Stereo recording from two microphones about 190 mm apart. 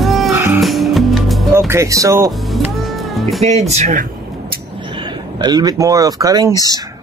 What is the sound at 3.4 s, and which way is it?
Speech, 35° right (ahead or behind).